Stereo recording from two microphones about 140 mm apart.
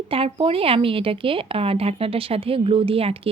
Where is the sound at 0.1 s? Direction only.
40° right (ahead or behind).